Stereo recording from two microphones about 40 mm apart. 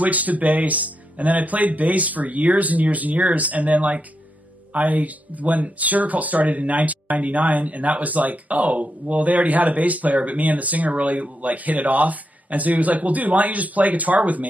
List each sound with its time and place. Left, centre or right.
0.0 s speech: right